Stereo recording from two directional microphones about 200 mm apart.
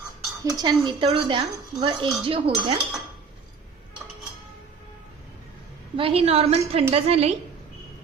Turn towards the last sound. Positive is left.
turn(degrees=-30)  # may be behind; listen again after turning